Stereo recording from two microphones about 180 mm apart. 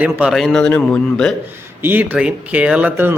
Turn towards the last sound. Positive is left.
turn(degrees=-10)  # may be behind; listen again after turning